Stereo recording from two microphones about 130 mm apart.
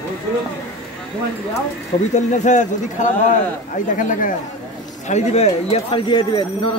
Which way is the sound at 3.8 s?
85° left.